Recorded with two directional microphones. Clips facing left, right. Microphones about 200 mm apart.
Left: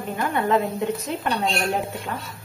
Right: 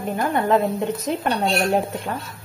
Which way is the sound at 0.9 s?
40° right (ahead or behind).